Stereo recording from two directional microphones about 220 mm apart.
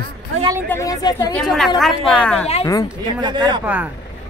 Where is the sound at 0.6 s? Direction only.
15° left (ahead or behind).